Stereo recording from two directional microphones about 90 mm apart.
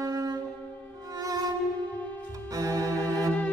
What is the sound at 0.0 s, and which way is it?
Music, 40° right (ahead or behind).